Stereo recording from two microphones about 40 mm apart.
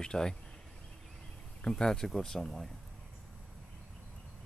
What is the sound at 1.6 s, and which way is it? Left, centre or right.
Speech, centre.